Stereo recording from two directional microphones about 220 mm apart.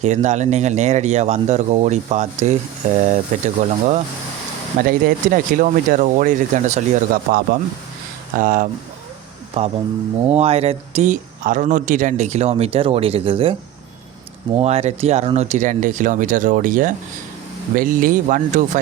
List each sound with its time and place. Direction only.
0.0 s speech: 30° right (ahead or behind)
9.6 s speech: 25° right (ahead or behind)
14.6 s speech: 30° right (ahead or behind)